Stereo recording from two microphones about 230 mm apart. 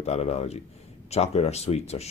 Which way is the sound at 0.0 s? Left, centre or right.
Left.